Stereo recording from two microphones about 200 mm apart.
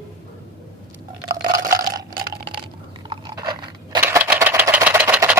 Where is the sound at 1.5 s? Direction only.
45° right (ahead or behind).